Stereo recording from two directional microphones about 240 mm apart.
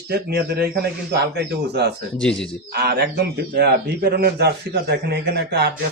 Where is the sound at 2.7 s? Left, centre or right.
Right.